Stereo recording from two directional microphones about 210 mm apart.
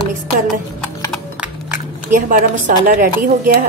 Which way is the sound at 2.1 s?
40° right (ahead or behind).